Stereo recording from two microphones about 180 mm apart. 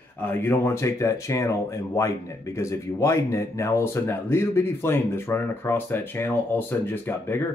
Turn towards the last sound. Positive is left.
turn(degrees=10)  # may be behind; listen again after turning